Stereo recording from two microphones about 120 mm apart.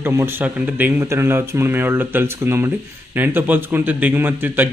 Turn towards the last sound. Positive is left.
turn(degrees=-15)  # may be behind; listen again after turning